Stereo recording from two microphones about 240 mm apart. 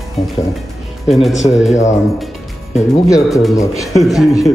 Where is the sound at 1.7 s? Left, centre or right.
Left.